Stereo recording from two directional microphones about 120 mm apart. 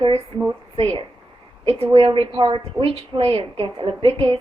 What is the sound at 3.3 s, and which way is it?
A woman's voice, 45° right (ahead or behind).